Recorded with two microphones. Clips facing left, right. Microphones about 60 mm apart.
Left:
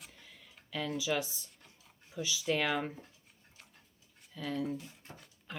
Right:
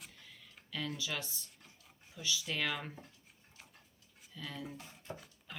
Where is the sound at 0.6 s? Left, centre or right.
Centre.